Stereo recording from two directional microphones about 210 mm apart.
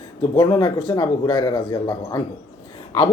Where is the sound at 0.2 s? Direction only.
20° left (ahead or behind).